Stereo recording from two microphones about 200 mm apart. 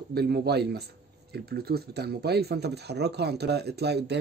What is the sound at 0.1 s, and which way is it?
Speech, 50° right (ahead or behind).